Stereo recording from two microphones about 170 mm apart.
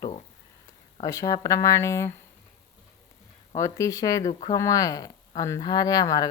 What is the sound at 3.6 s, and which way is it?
Speech, 20° left (ahead or behind).